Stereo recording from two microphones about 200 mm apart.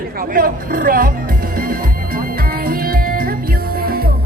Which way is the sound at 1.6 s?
45° right (ahead or behind).